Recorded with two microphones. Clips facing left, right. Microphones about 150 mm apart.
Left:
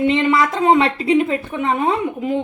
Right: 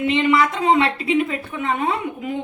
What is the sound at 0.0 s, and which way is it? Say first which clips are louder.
Speech: left 2 dB; 30° left (ahead or behind).